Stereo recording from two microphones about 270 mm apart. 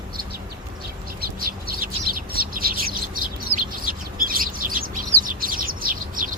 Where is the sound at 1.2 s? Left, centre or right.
Right.